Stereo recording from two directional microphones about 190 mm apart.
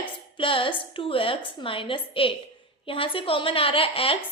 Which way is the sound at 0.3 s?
25° left (ahead or behind).